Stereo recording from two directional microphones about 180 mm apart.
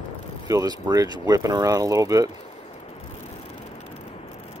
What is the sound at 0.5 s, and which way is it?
Speech, 20° right (ahead or behind).